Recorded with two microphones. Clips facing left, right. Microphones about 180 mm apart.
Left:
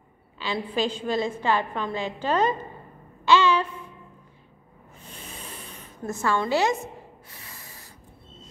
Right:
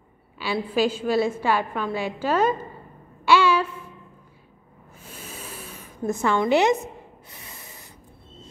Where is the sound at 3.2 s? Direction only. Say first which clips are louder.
Right 1 dB; 10° right (ahead or behind).